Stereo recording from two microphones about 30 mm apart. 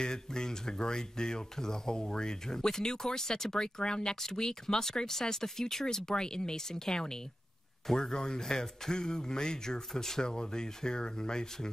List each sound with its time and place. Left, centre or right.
0.0 s speech: left